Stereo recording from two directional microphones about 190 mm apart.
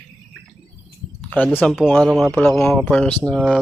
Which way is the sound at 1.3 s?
5° left (ahead or behind).